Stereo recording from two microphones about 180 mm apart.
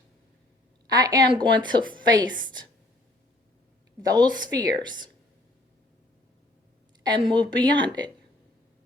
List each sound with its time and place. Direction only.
0.9 s a woman's voice: 20° right (ahead or behind)
4.0 s a woman's voice: 20° right (ahead or behind)
7.1 s a woman's voice: 25° right (ahead or behind)